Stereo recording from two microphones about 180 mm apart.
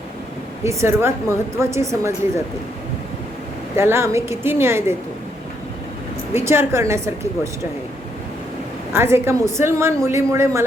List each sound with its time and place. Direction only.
0.6 s a woman's voice: 15° right (ahead or behind)
3.8 s a woman's voice: 15° right (ahead or behind)
6.3 s a woman's voice: 15° right (ahead or behind)
8.9 s a woman's voice: 15° right (ahead or behind)